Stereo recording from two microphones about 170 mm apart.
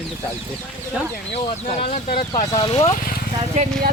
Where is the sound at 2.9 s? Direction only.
55° left (ahead or behind).